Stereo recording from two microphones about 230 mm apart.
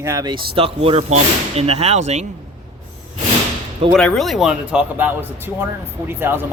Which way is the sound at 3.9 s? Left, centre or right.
Centre.